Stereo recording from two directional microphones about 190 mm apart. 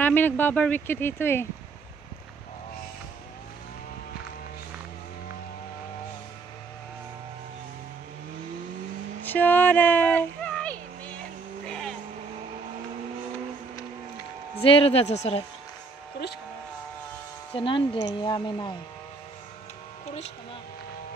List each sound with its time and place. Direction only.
0.0 s speech: 10° left (ahead or behind)
9.2 s a sound: 10° left (ahead or behind)
14.6 s speech: 30° left (ahead or behind)
17.6 s speech: 25° left (ahead or behind)